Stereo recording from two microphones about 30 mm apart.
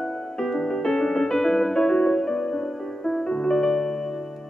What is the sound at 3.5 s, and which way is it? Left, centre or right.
Music, centre.